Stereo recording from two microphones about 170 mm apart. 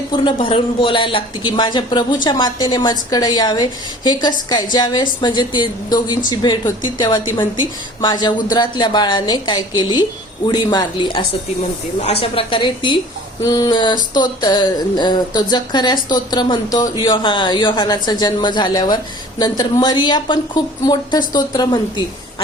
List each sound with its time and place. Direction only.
0.3 s a woman's voice: 30° left (ahead or behind)